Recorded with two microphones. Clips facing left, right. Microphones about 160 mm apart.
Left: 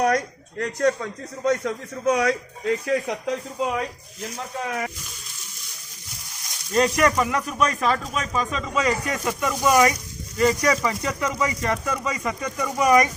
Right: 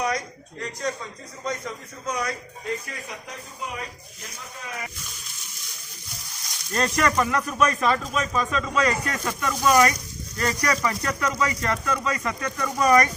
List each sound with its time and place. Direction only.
0.0 s a man's voice: 60° left (ahead or behind); by 3.8 s 90° left
4.4 s speech: 65° left (ahead or behind)
6.7 s speech: 10° left (ahead or behind)